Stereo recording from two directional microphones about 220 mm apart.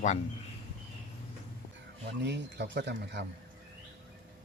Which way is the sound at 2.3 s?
50° right (ahead or behind).